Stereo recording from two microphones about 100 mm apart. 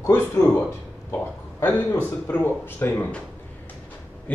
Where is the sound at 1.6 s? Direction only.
20° left (ahead or behind).